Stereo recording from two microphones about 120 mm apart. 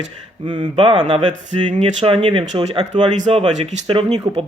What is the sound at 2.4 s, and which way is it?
Speech, 70° right (ahead or behind).